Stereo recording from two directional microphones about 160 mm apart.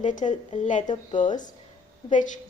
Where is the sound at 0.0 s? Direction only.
50° left (ahead or behind).